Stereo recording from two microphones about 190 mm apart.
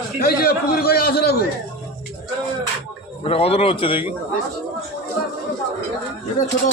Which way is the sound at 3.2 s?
30° left (ahead or behind).